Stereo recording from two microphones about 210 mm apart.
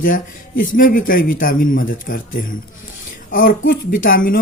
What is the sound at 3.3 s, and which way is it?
A woman's voice, 45° left (ahead or behind).